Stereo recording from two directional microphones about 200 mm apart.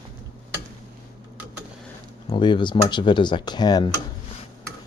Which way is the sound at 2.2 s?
25° left (ahead or behind).